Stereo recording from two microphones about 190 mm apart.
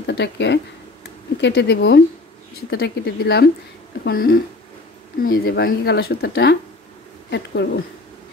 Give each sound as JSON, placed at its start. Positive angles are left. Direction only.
{"t": 0.0, "sound": "speech", "side_deg": 65}